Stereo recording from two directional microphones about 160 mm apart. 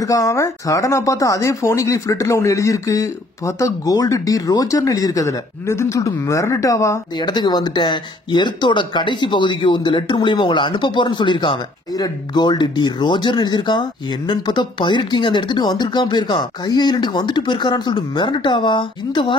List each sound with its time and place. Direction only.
0.0 s speech: 20° left (ahead or behind)